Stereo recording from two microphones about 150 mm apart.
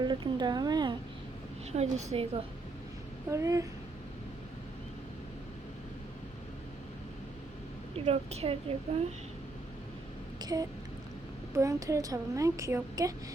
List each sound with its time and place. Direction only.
0.0 s a woman's voice: 30° right (ahead or behind)
1.7 s a woman's voice: 50° right (ahead or behind)
3.2 s a woman's voice: 20° right (ahead or behind)
7.9 s a woman's voice: 45° right (ahead or behind)
10.4 s a woman's voice: 25° right (ahead or behind)